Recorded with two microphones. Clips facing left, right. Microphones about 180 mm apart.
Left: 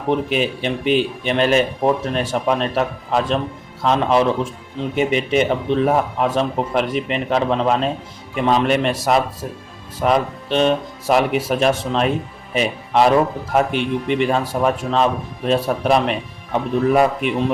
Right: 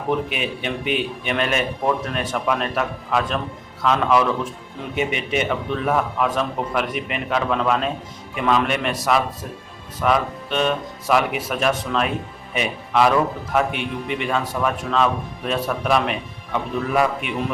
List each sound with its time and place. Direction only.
0.1 s speech: 30° left (ahead or behind)